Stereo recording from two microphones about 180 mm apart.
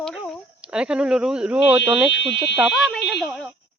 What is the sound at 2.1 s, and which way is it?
Speech, 85° left.